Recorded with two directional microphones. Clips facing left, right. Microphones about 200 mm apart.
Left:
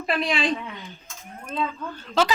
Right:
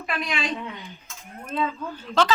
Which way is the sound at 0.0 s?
30° left (ahead or behind).